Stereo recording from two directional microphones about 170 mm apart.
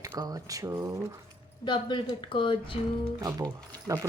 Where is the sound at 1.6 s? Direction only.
25° left (ahead or behind).